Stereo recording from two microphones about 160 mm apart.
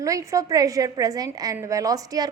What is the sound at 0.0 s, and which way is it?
A woman's voice, 20° right (ahead or behind).